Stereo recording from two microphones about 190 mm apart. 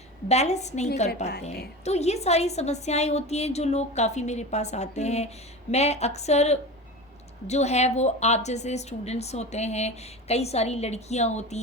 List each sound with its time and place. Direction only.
0.3 s a woman's voice: 35° left (ahead or behind)